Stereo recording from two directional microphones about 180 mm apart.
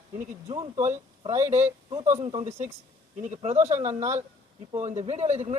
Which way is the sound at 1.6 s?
15° right (ahead or behind).